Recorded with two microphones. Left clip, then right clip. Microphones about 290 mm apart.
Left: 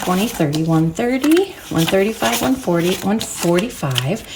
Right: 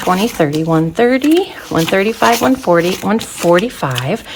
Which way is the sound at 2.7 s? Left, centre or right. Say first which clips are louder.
Right 7 dB; right.